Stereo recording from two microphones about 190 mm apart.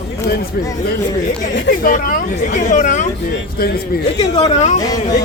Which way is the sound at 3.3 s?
55° left (ahead or behind).